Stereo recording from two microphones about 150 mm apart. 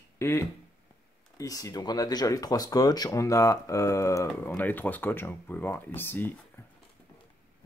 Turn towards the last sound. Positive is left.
turn(degrees=15)  # may be behind; listen again after turning